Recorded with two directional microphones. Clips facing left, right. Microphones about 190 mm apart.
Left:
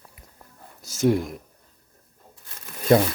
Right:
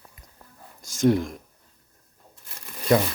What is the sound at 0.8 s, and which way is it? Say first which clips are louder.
Speech: even; 5° left (ahead or behind).